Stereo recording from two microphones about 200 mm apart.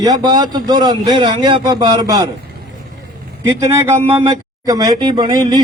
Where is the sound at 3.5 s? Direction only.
15° right (ahead or behind).